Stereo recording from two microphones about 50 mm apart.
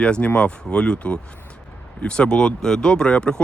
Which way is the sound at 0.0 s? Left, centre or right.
Left.